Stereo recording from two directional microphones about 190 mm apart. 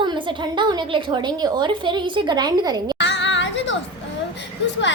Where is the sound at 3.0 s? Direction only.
70° left (ahead or behind).